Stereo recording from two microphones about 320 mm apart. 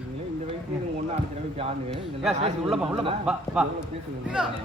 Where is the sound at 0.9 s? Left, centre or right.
Centre.